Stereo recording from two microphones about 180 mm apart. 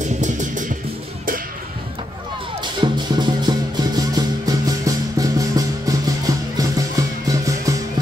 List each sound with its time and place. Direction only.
0.0 s music: 45° right (ahead or behind)
2.8 s music: 25° right (ahead or behind)